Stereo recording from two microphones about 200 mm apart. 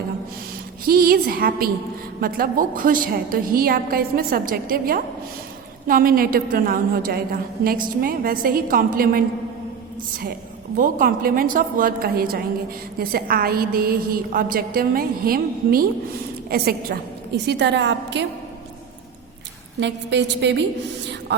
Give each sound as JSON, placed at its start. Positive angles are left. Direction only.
{"t": 0.9, "sound": "a woman's voice", "side_deg": -50}
{"t": 10.8, "sound": "a woman's voice", "side_deg": -40}
{"t": 19.8, "sound": "a woman's voice", "side_deg": -60}